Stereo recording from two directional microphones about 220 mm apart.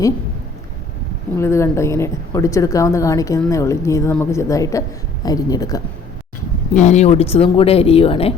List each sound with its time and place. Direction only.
1.4 s a woman's voice: 10° left (ahead or behind)
6.7 s speech: 30° left (ahead or behind)